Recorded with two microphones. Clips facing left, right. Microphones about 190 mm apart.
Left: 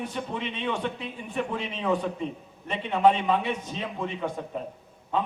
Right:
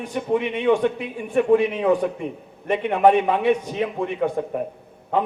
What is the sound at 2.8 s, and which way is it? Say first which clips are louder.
Speech: right 5 dB; 60° right (ahead or behind).